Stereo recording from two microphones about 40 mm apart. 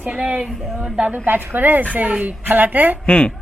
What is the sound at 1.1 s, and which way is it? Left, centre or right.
Speech, right.